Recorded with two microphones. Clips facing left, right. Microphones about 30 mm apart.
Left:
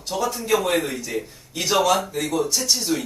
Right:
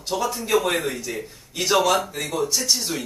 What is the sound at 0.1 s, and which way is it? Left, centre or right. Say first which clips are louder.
Speech: even; centre.